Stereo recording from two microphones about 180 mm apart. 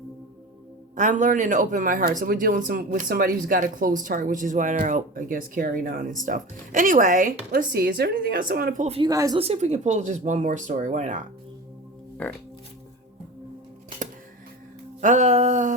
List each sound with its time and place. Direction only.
0.9 s speech: 45° right (ahead or behind)
9.0 s a woman's voice: 20° right (ahead or behind)
9.4 s speech: 35° right (ahead or behind)
12.2 s speech: 10° left (ahead or behind)
15.0 s speech: 40° right (ahead or behind)